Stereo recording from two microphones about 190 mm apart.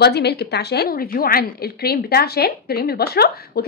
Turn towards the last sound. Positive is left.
turn(degrees=55)  # may be behind; listen again after turning